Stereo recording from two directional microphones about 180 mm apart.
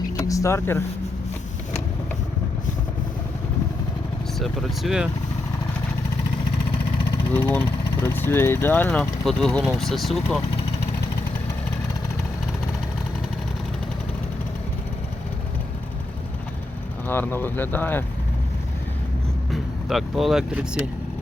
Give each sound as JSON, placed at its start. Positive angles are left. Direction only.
{"t": 0.2, "sound": "a sound", "side_deg": 15}
{"t": 4.4, "sound": "speech", "side_deg": 0}
{"t": 7.3, "sound": "speech", "side_deg": 10}
{"t": 17.1, "sound": "speech", "side_deg": 10}
{"t": 19.5, "sound": "speech", "side_deg": 0}